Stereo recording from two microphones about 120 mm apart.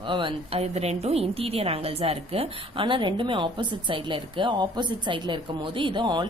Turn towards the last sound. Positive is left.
turn(degrees=-40)  # may be behind; listen again after turning